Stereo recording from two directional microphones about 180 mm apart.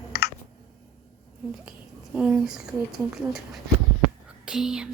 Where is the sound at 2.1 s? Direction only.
5° right (ahead or behind).